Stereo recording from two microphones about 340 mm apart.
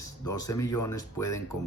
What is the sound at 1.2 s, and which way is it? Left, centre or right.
Speech, left.